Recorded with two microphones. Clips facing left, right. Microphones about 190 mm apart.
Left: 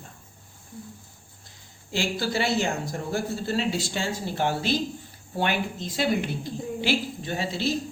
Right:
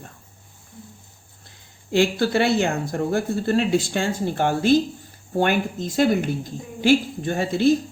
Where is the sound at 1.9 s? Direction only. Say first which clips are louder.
Right 8 dB; 55° right (ahead or behind).